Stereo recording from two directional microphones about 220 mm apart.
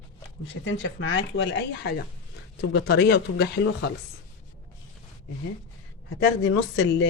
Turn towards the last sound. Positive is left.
turn(degrees=55)  # may be behind; listen again after turning